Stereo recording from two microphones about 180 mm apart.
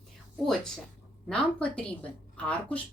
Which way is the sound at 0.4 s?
Centre (ahead or behind).